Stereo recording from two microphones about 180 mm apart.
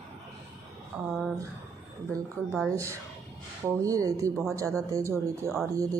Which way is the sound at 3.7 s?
20° right (ahead or behind).